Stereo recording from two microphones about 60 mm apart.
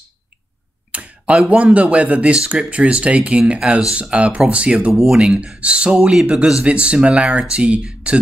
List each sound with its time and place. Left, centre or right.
0.9 s speech: right
4.9 s speech: centre
6.6 s speech: centre